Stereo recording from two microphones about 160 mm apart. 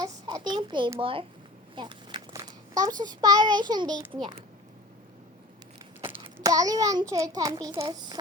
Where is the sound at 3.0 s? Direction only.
25° right (ahead or behind).